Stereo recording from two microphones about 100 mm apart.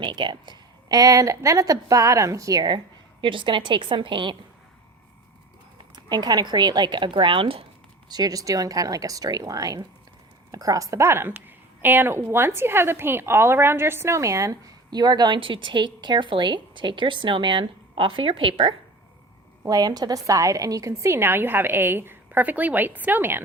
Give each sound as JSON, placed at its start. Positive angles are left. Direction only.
{"t": 0.0, "sound": "a woman's voice", "side_deg": -50}
{"t": 2.7, "sound": "a woman's voice", "side_deg": -55}
{"t": 6.1, "sound": "a woman's voice", "side_deg": -45}
{"t": 8.1, "sound": "a woman's voice", "side_deg": -40}
{"t": 19.6, "sound": "a woman's voice", "side_deg": -40}